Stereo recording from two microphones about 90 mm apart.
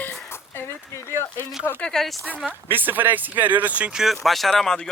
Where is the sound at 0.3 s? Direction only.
25° left (ahead or behind).